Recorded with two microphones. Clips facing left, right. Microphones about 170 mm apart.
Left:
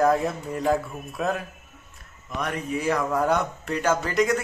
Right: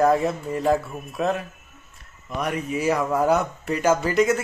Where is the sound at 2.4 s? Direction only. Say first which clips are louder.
Right 3 dB; 10° right (ahead or behind).